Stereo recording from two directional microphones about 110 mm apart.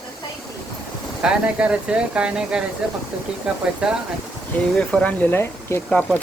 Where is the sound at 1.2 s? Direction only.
10° right (ahead or behind).